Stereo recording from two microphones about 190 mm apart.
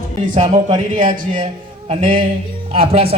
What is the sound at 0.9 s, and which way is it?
Speech, 45° right (ahead or behind).